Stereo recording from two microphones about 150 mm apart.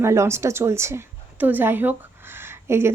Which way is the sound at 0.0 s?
20° right (ahead or behind).